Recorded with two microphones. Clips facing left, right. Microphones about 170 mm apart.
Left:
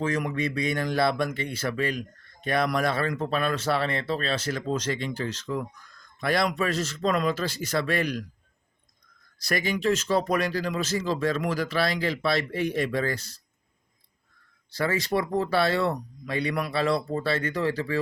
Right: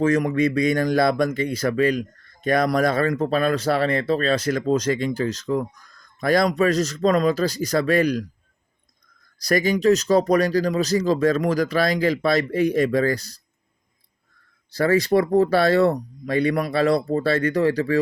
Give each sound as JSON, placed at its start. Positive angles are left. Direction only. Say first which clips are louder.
{"t": 0.0, "sound": "speech", "louder": "right 8 dB", "side_deg": -45}
{"t": 9.4, "sound": "speech", "louder": "right 7 dB", "side_deg": -40}
{"t": 14.7, "sound": "speech", "louder": "right 8 dB", "side_deg": -40}